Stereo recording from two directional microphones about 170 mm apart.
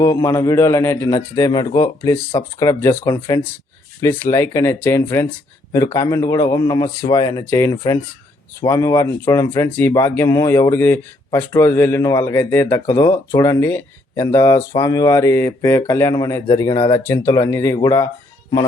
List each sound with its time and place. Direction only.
0.0 s a man's voice: 20° left (ahead or behind)
9.6 s a man's voice: 10° left (ahead or behind)